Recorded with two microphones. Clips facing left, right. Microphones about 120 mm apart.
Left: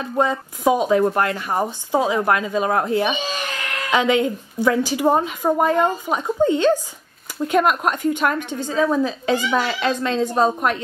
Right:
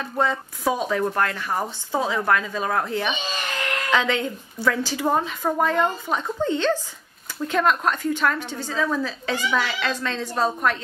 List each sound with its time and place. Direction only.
0.0 s a woman's voice: 15° left (ahead or behind)
9.8 s a woman's voice: 15° left (ahead or behind)